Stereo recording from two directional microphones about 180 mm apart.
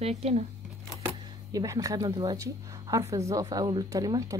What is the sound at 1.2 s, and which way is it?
Speech, 20° right (ahead or behind).